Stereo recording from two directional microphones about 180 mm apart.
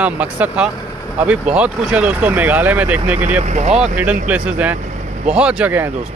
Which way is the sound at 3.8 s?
5° right (ahead or behind).